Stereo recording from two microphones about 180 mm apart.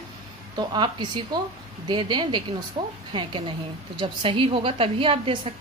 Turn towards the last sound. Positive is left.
turn(degrees=-30)  # may be behind; listen again after turning